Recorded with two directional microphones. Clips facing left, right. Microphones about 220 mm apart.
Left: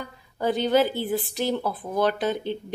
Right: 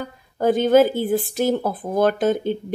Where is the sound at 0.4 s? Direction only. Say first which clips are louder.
Right 6 dB; 50° right (ahead or behind).